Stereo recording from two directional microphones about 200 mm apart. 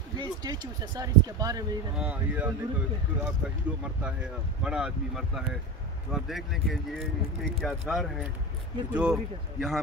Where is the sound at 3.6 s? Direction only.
5° right (ahead or behind).